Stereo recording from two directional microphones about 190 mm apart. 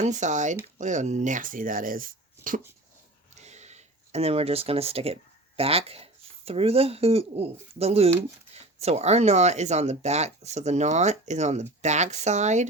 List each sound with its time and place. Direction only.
0.0 s speech: 40° right (ahead or behind)